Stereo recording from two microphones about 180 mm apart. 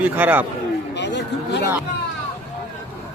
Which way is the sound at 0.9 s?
75° left (ahead or behind).